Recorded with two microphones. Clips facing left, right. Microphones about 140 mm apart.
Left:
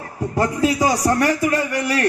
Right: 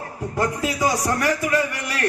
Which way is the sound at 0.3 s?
35° left (ahead or behind).